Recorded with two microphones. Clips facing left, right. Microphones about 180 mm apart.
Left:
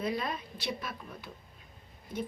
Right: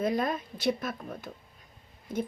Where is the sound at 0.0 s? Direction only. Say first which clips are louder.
Right 5 dB; 45° right (ahead or behind).